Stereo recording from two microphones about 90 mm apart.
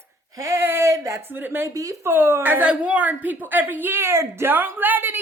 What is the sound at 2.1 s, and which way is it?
A woman's voice, 25° right (ahead or behind).